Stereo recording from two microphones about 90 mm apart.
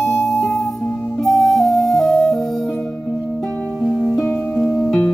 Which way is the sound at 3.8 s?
30° left (ahead or behind).